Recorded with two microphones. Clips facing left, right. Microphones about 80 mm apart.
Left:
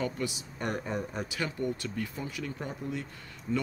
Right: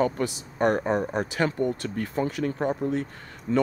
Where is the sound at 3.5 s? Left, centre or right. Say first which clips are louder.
Right 8 dB; right.